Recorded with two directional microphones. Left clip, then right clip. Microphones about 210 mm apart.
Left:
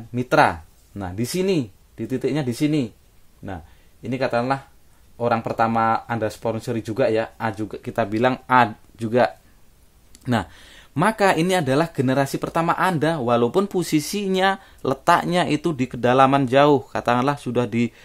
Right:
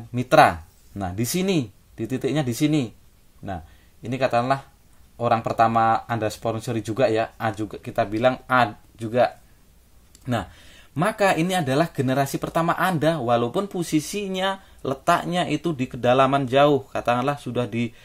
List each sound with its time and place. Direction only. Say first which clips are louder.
0.1 s speech: right 2 dB; 15° left (ahead or behind)
4.0 s speech: even; 20° left (ahead or behind)